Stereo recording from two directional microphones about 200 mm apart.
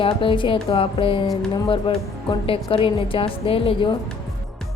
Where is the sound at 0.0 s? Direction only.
25° left (ahead or behind).